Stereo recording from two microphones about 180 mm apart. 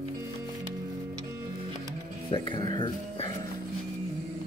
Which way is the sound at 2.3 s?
25° left (ahead or behind).